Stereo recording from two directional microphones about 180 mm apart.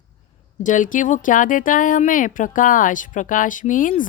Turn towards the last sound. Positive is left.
turn(degrees=45)  # may be behind; listen again after turning